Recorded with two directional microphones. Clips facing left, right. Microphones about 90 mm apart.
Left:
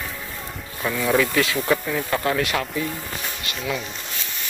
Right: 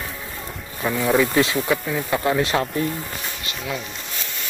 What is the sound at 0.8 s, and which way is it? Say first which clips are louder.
Speech: right 2 dB; 15° right (ahead or behind).